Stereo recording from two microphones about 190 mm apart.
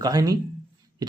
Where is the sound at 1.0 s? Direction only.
20° right (ahead or behind).